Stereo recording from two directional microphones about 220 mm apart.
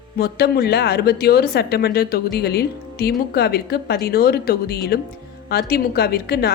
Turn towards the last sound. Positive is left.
turn(degrees=45)  # may be behind; listen again after turning